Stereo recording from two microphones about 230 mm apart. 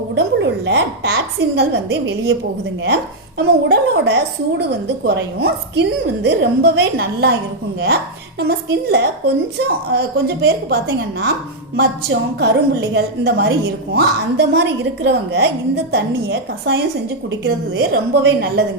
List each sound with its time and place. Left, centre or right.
0.2 s a woman's voice: right
8.4 s a woman's voice: right